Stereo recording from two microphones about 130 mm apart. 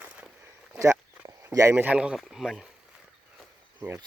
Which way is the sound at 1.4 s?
20° right (ahead or behind).